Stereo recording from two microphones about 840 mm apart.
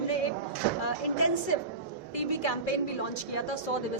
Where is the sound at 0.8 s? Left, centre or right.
Left.